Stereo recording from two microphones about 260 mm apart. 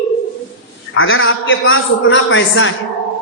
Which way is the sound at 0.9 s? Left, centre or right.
Left.